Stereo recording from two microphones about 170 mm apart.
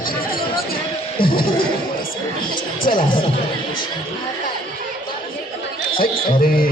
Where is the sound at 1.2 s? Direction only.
60° left (ahead or behind).